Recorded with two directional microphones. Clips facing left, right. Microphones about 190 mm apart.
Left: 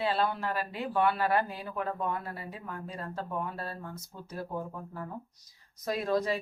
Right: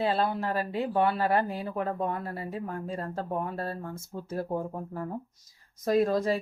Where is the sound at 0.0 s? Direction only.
40° right (ahead or behind).